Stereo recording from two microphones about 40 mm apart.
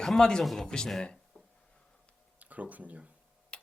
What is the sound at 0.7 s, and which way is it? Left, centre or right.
Speech, centre.